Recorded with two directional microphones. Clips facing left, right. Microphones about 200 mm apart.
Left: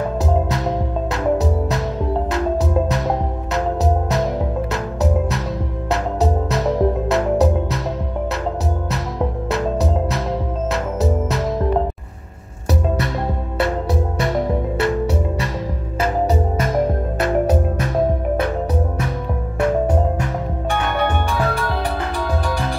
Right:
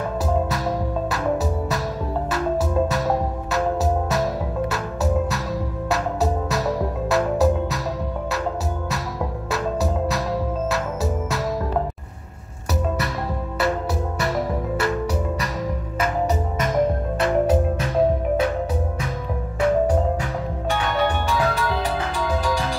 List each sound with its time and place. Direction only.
0.5 s music: 20° left (ahead or behind)
6.5 s music: 20° left (ahead or behind)
14.2 s music: 25° left (ahead or behind)
20.7 s music: 55° left (ahead or behind)